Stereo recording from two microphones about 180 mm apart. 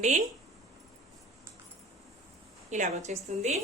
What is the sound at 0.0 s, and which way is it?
Speech, 40° right (ahead or behind).